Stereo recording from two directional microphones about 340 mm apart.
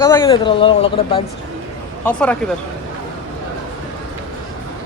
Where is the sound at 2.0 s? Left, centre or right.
Centre.